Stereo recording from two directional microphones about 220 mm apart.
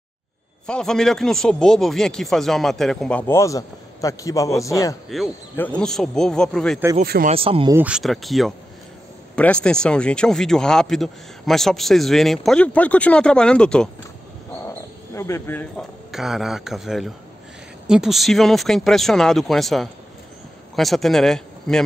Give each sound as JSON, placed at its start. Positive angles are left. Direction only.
{"t": 0.7, "sound": "speech", "side_deg": 5}
{"t": 5.1, "sound": "speech", "side_deg": 0}
{"t": 7.0, "sound": "speech", "side_deg": -40}
{"t": 7.3, "sound": "speech", "side_deg": -25}
{"t": 7.7, "sound": "speech", "side_deg": -5}